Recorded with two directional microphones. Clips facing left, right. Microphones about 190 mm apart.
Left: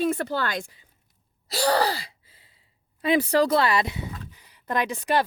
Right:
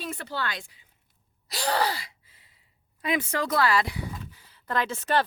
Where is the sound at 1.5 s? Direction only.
35° left (ahead or behind).